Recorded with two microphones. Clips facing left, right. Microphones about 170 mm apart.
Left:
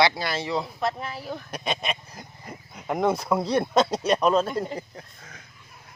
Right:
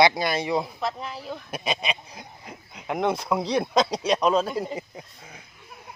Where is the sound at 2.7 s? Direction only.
Centre (ahead or behind).